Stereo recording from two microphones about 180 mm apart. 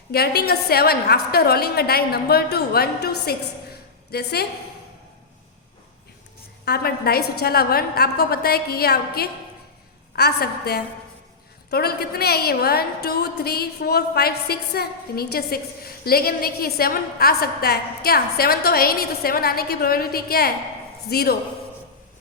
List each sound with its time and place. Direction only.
0.1 s a woman's voice: 60° left (ahead or behind)
6.7 s a woman's voice: 60° left (ahead or behind)